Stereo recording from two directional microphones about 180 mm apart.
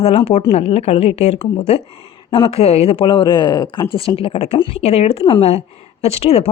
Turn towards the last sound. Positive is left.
turn(degrees=35)  # may be behind; listen again after turning